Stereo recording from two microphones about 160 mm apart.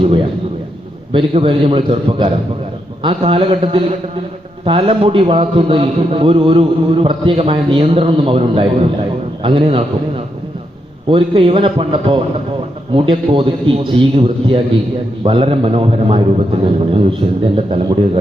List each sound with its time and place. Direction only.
1.1 s a man's voice: 35° right (ahead or behind)
11.1 s a man's voice: 35° right (ahead or behind)